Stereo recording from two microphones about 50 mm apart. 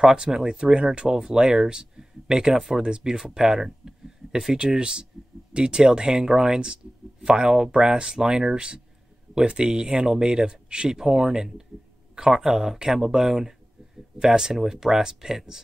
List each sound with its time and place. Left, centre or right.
0.0 s speech: centre